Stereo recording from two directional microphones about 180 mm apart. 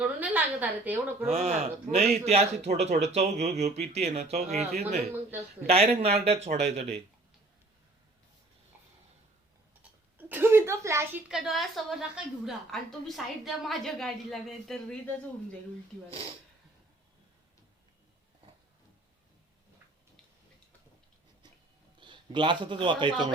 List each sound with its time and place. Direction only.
0.2 s a woman's voice: 10° right (ahead or behind)
1.3 s speech: 35° right (ahead or behind)
10.2 s a woman's voice: 10° right (ahead or behind)
11.3 s a woman's voice: centre (ahead or behind)
22.0 s a man's voice: 25° right (ahead or behind)